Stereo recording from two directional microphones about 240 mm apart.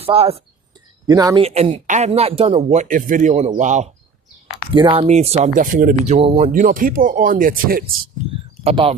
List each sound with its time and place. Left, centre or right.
0.0 s speech: right
4.7 s speech: centre; by 7.9 s right
8.6 s speech: right